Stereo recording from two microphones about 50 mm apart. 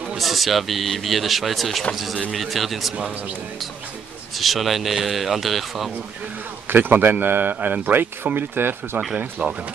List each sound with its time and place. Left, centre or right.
0.2 s speech: centre
4.4 s speech: centre
6.7 s a man's voice: right
9.4 s speech: right